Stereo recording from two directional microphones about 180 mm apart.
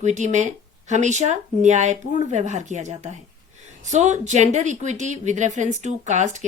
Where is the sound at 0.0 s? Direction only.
40° right (ahead or behind).